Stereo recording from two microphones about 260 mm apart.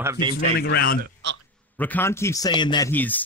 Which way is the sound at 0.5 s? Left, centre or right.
Left.